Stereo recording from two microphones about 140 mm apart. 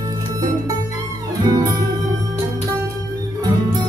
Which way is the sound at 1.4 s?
25° right (ahead or behind).